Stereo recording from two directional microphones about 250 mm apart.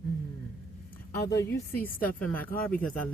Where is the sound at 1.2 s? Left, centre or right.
Left.